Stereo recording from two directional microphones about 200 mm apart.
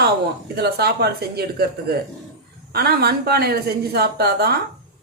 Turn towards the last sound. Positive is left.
turn(degrees=-50)  # may be behind; listen again after turning